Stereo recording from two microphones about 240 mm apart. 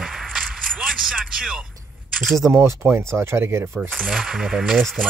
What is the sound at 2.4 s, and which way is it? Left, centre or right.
Speech, centre.